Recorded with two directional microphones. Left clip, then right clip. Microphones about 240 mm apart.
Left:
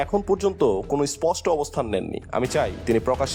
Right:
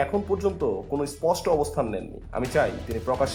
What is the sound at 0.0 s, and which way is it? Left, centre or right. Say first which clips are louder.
Speech: left 3 dB; left.